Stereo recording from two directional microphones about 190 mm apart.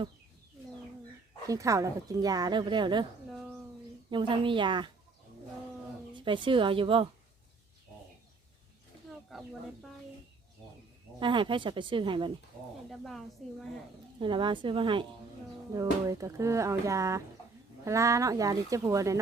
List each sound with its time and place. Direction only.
1.5 s speech: 15° right (ahead or behind)
4.1 s speech: 25° right (ahead or behind)
6.1 s speech: 25° right (ahead or behind)
9.3 s speech: centre (ahead or behind)
11.2 s speech: 25° right (ahead or behind)
12.9 s a woman's voice: centre (ahead or behind)
14.2 s speech: 25° right (ahead or behind)